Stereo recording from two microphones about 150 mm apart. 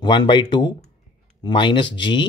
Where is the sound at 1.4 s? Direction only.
30° left (ahead or behind).